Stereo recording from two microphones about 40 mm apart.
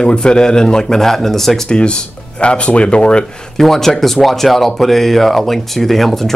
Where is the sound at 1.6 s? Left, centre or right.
Left.